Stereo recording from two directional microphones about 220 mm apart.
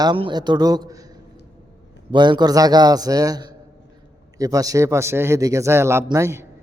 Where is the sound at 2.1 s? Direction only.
20° right (ahead or behind).